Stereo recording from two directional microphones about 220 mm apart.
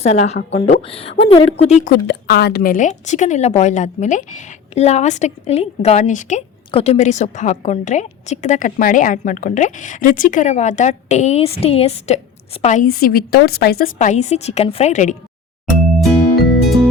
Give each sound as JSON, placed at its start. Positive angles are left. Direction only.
{"t": 0.0, "sound": "a woman's voice", "side_deg": 30}
{"t": 16.0, "sound": "music", "side_deg": 0}